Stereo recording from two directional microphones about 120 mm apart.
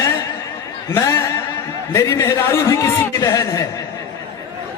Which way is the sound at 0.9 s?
25° left (ahead or behind).